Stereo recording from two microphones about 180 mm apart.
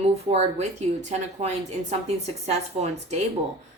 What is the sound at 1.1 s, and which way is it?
A woman's voice, 40° right (ahead or behind).